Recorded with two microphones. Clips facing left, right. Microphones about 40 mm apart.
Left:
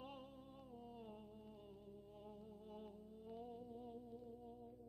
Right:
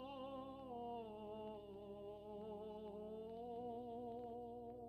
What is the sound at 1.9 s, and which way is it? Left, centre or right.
Music, right.